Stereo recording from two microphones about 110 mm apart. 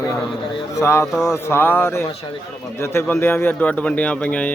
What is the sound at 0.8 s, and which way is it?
A man's voice, 25° left (ahead or behind).